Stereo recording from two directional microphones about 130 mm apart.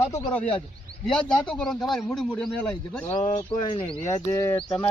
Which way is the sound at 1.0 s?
5° left (ahead or behind).